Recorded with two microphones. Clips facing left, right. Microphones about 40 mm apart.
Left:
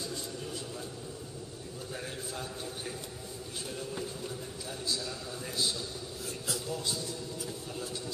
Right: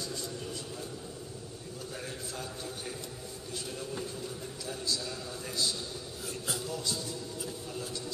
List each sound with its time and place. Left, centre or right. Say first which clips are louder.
6.7 s a man's voice: left 2 dB; left